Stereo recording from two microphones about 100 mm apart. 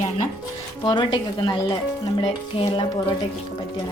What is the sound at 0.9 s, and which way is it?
Speech, 50° left (ahead or behind).